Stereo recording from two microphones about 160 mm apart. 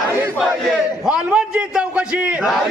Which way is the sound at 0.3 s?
Centre (ahead or behind).